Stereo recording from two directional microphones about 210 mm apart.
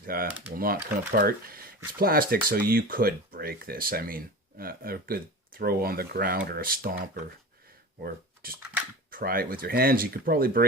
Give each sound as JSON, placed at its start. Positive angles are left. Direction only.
{"t": 0.0, "sound": "speech", "side_deg": -45}